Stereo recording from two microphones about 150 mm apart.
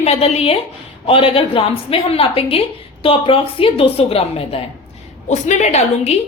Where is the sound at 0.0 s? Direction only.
45° left (ahead or behind).